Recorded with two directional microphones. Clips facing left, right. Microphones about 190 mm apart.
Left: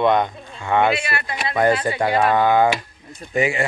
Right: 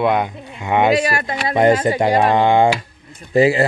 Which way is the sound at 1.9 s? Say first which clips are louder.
Right 4 dB; 20° right (ahead or behind).